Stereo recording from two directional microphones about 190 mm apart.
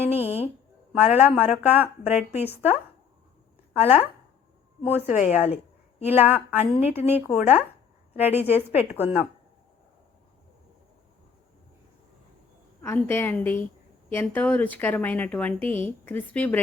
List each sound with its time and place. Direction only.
0.3 s speech: 30° left (ahead or behind)
0.9 s a woman's voice: 10° right (ahead or behind)
3.8 s a woman's voice: 10° right (ahead or behind)
5.2 s a woman's voice: 10° right (ahead or behind)
12.8 s a woman's voice: 10° left (ahead or behind)